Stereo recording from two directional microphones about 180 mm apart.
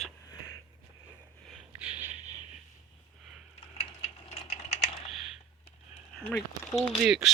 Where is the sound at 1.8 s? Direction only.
40° right (ahead or behind).